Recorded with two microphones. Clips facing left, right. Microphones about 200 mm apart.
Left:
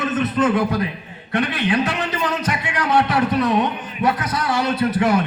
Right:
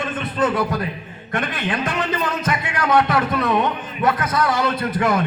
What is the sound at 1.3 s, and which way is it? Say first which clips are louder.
Speech: left 4 dB; 50° right (ahead or behind).